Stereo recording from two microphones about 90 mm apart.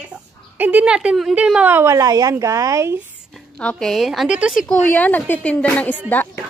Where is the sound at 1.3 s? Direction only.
15° right (ahead or behind).